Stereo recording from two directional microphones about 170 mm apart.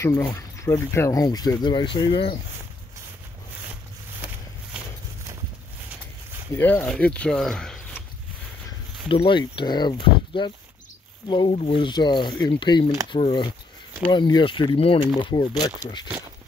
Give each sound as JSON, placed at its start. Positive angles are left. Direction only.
{"t": 0.0, "sound": "speech", "side_deg": 20}
{"t": 4.7, "sound": "clip-clop", "side_deg": -5}
{"t": 6.5, "sound": "speech", "side_deg": 10}
{"t": 9.1, "sound": "speech", "side_deg": 30}